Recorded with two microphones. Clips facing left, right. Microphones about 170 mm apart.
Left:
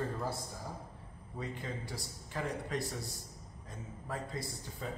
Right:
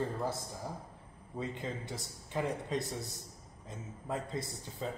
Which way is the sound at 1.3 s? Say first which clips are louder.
Right 2 dB; 25° right (ahead or behind).